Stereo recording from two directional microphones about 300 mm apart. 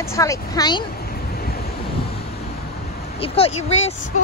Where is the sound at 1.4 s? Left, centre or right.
Left.